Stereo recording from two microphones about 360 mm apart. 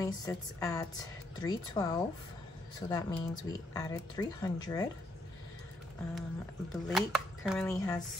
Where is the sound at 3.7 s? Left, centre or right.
Centre.